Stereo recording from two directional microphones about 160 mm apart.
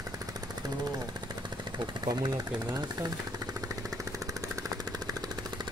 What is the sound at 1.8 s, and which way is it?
Speech, 25° right (ahead or behind).